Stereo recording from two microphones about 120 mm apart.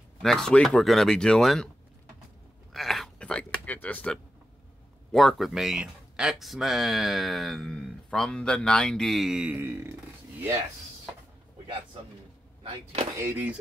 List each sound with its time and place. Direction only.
0.2 s speech: 5° left (ahead or behind)
2.7 s a sound: centre (ahead or behind)
5.1 s speech: centre (ahead or behind)
9.6 s speech: 20° right (ahead or behind)
13.2 s speech: 20° right (ahead or behind)